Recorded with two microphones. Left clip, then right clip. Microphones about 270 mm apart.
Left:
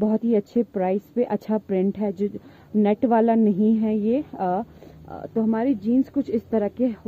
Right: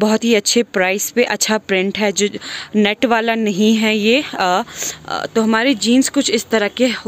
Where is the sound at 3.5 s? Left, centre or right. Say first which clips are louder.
Right 6 dB; right.